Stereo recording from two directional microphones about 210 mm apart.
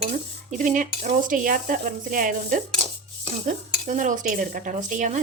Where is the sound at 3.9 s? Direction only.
35° right (ahead or behind).